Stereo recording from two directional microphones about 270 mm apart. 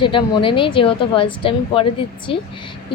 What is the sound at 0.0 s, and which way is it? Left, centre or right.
Speech, centre.